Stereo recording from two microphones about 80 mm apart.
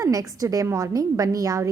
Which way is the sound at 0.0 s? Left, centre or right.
Right.